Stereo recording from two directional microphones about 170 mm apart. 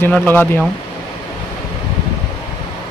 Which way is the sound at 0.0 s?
10° left (ahead or behind).